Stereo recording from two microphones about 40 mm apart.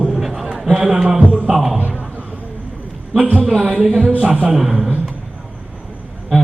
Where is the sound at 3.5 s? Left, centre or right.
Right.